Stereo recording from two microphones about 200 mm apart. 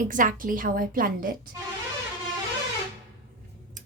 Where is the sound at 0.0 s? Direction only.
40° right (ahead or behind).